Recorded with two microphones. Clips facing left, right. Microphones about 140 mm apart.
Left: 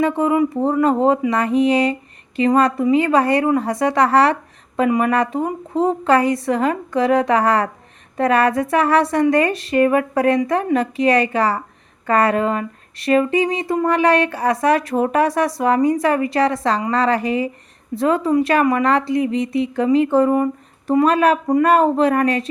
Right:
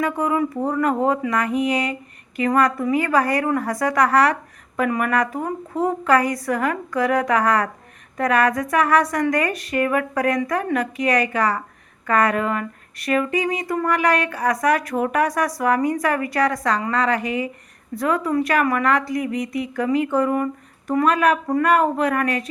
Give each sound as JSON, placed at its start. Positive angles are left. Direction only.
{"t": 0.0, "sound": "a woman's voice", "side_deg": 25}